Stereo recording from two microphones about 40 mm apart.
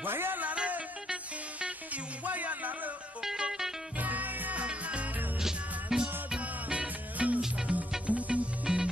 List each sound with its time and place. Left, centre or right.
0.0 s music: right
1.0 s music: right
1.9 s music: right
3.2 s music: centre
4.0 s music: right
4.6 s music: right
5.4 s music: centre
6.4 s music: right
8.6 s music: centre